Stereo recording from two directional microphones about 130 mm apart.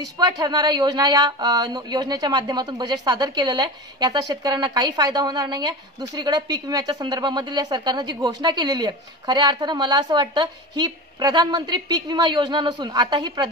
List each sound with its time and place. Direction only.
0.2 s a woman's voice: 30° right (ahead or behind)